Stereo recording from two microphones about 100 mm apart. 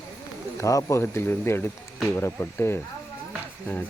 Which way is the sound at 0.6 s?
35° left (ahead or behind).